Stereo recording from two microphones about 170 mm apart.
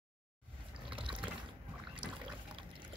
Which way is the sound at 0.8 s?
30° right (ahead or behind).